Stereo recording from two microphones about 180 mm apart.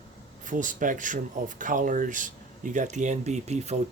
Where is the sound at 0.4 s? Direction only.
45° right (ahead or behind).